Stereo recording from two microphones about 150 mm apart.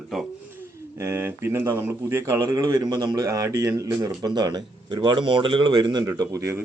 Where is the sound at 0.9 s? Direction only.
20° right (ahead or behind).